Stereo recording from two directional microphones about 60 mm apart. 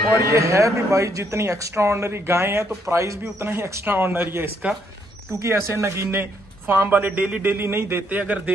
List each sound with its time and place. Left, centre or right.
0.1 s speech: right
3.8 s a man's voice: right
5.4 s speech: right
6.9 s speech: right
7.4 s a man's voice: right
8.1 s speech: right